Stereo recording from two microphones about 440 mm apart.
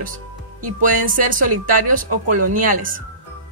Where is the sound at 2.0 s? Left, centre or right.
Right.